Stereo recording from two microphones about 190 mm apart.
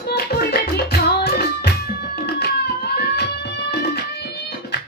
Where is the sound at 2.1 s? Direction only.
60° left (ahead or behind).